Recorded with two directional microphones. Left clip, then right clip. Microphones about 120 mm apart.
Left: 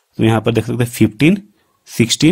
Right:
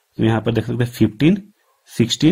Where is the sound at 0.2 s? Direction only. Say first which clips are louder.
Left 4 dB; 40° left (ahead or behind).